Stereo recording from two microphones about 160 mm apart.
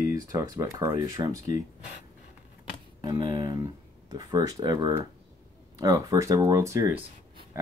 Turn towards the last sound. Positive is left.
turn(degrees=-20)  # may be behind; listen again after turning